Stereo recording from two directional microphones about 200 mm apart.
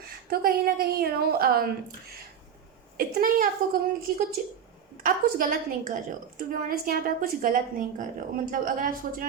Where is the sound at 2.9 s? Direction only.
45° right (ahead or behind).